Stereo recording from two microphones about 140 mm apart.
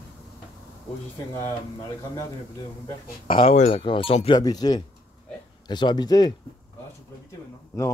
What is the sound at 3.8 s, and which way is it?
Speech, 40° left (ahead or behind).